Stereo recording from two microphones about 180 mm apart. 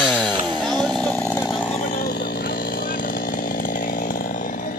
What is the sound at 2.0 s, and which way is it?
Chainsaw, 60° left (ahead or behind).